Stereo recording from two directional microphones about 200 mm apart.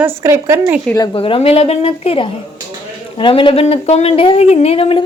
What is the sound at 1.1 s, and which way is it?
Speech, 25° left (ahead or behind).